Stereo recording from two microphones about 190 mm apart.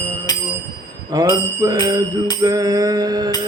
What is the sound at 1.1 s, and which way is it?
Music, 20° right (ahead or behind).